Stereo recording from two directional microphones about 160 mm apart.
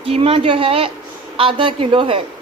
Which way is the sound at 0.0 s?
35° right (ahead or behind).